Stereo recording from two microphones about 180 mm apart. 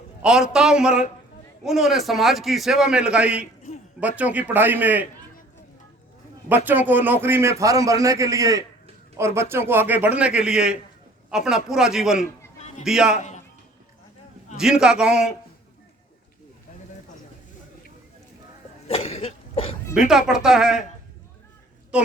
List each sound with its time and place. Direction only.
0.2 s a man's voice: 5° right (ahead or behind)
6.7 s a man's voice: 10° right (ahead or behind)
14.5 s a man's voice: 5° right (ahead or behind)
18.9 s cough: 35° left (ahead or behind)
20.1 s a man's voice: 5° right (ahead or behind)